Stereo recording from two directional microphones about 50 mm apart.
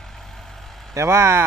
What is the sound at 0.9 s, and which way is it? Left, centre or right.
Speech, right.